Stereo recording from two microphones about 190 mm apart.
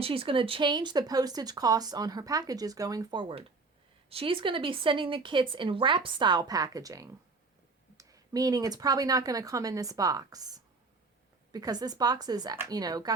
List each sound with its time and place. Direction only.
0.0 s speech: 30° right (ahead or behind)